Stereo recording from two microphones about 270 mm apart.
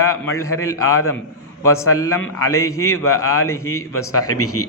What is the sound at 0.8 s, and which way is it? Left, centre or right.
Speech, left.